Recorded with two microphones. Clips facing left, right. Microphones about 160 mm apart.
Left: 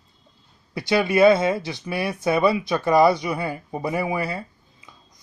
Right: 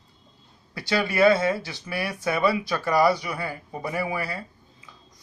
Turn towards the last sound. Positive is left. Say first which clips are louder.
# left 4 dB
turn(degrees=20)  # may be behind; listen again after turning